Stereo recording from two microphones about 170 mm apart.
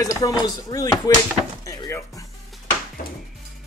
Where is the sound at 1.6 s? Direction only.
20° left (ahead or behind).